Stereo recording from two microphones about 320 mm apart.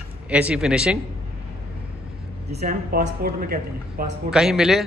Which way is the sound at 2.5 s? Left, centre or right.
Right.